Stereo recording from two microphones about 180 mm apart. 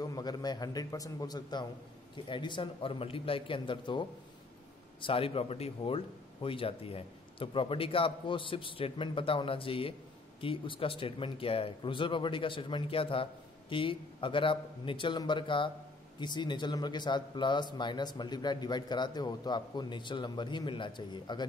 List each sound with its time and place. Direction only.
0.0 s speech: 20° left (ahead or behind)
5.0 s speech: 30° left (ahead or behind)